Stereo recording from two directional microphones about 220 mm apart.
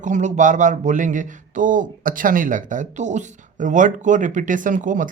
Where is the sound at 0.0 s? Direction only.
35° right (ahead or behind).